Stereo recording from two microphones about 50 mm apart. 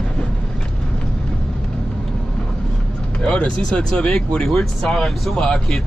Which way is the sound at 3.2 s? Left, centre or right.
Centre.